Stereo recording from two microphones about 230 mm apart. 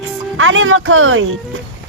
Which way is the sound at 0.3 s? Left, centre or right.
Right.